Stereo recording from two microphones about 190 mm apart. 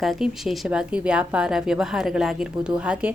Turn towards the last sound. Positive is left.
turn(degrees=-5)  # may be behind; listen again after turning